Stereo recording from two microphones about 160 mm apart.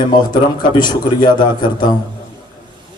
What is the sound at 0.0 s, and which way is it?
Speech, 25° left (ahead or behind).